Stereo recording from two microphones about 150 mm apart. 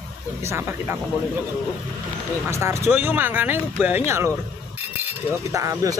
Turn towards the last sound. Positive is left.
turn(degrees=-20)  # may be behind; listen again after turning